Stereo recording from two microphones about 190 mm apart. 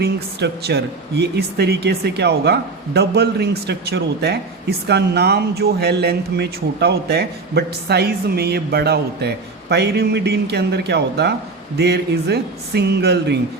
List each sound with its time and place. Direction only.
0.0 s speech: 60° right (ahead or behind)